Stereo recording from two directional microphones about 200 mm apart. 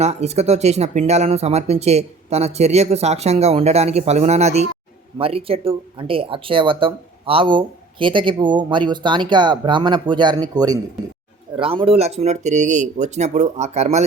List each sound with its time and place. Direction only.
0.0 s speech: 35° right (ahead or behind)